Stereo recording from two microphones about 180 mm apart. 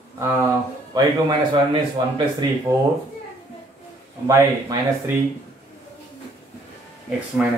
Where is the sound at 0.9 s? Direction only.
25° right (ahead or behind).